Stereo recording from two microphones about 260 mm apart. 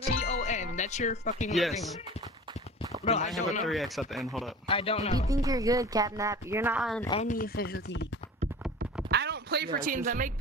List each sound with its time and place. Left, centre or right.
0.0 s music: left
1.5 s speech: centre
3.1 s speech: left
3.6 s speech: centre
4.6 s speech: left
5.3 s speech: centre
7.1 s speech: left
9.1 s a sound: right